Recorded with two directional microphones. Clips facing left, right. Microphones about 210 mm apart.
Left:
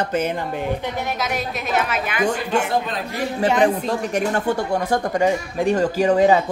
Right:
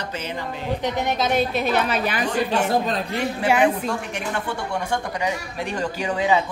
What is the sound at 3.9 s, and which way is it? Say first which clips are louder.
Speech: left 6 dB; 40° left (ahead or behind).